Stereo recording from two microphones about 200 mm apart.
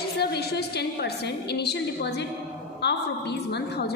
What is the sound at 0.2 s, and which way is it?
A woman's voice, 55° left (ahead or behind).